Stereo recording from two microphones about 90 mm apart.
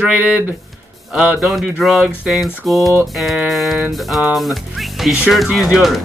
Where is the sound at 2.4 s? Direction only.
Centre (ahead or behind).